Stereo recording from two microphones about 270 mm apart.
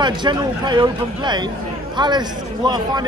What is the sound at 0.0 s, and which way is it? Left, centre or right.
Speech, centre.